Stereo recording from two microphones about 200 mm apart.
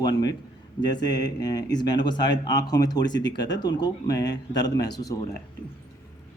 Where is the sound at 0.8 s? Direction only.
20° left (ahead or behind).